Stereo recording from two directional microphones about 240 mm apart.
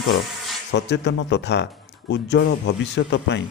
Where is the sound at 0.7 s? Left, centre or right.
Left.